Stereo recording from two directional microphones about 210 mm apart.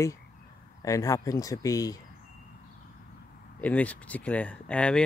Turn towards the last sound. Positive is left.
turn(degrees=5)  # may be behind; listen again after turning